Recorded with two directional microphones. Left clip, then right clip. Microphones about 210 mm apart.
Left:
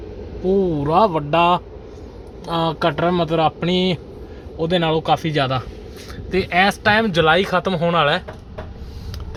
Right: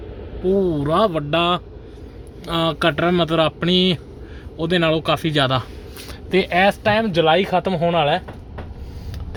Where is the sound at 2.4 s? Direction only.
20° right (ahead or behind); by 8.3 s 5° right (ahead or behind).